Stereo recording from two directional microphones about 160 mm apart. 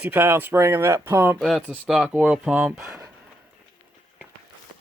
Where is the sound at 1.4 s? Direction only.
Centre (ahead or behind).